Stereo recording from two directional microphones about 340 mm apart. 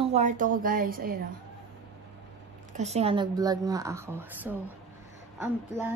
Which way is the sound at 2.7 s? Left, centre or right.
Centre.